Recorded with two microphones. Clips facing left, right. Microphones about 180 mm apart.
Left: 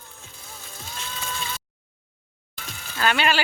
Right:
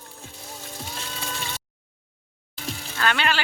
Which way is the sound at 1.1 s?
35° right (ahead or behind).